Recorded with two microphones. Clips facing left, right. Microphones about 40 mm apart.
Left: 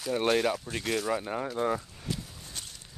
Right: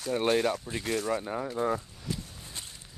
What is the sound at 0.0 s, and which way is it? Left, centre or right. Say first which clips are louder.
Speech: even; centre.